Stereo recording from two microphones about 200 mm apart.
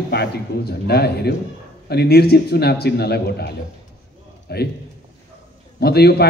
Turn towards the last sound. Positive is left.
turn(degrees=50)  # may be behind; listen again after turning